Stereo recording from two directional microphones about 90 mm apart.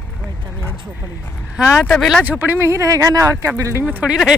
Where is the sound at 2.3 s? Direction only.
25° right (ahead or behind).